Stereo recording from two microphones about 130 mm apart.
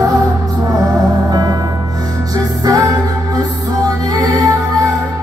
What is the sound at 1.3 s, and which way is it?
Music, 30° right (ahead or behind).